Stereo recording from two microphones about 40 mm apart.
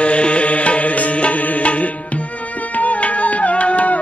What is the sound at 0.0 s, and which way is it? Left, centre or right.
Music, left.